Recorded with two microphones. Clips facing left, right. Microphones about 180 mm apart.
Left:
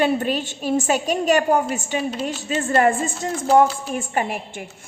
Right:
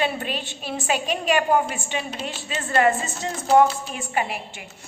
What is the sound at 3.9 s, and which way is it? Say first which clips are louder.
Speech: left 3 dB; 45° left (ahead or behind).